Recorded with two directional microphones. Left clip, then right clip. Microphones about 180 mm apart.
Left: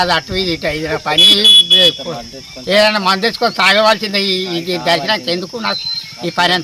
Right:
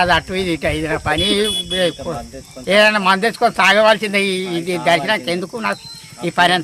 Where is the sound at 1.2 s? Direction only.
25° right (ahead or behind).